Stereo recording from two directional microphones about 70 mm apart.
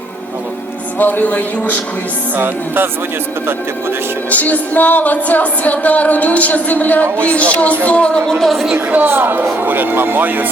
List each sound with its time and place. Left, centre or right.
0.9 s music: left
2.3 s music: right
4.3 s music: left
8.4 s a woman's voice: centre
8.7 s speech: right